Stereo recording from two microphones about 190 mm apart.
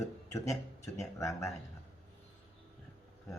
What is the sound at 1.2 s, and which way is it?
Speech, 15° left (ahead or behind).